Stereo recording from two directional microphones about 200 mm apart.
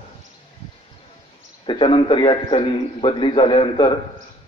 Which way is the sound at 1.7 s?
25° left (ahead or behind).